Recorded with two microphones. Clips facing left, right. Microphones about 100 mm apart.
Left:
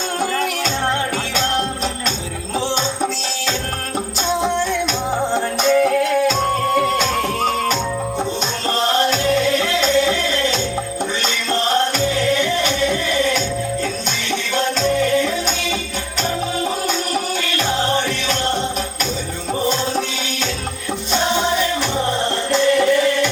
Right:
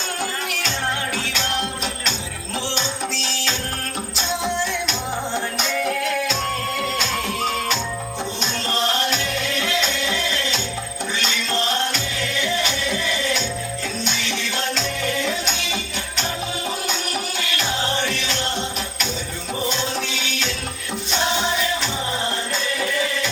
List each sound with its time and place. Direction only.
1.1 s music: 40° left (ahead or behind)
2.7 s music: 40° left (ahead or behind)
8.7 s music: 40° left (ahead or behind)
11.7 s music: 40° left (ahead or behind)
19.6 s music: 40° left (ahead or behind)
22.5 s music: 70° left (ahead or behind)